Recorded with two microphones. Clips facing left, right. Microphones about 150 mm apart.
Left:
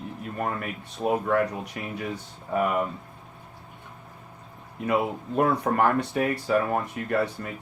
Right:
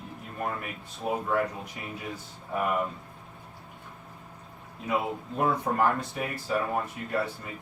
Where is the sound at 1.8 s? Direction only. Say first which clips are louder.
Left 6 dB; 70° left (ahead or behind).